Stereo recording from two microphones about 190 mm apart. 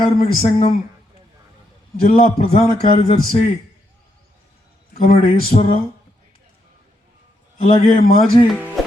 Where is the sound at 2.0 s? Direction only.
40° left (ahead or behind).